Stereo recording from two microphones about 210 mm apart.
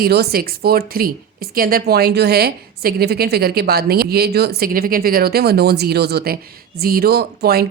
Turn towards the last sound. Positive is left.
turn(degrees=-50)  # may be behind; listen again after turning